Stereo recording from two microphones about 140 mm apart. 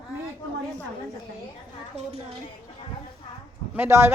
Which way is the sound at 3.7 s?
15° right (ahead or behind).